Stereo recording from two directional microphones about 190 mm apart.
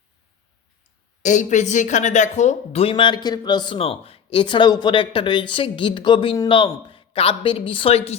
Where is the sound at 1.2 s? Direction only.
40° left (ahead or behind).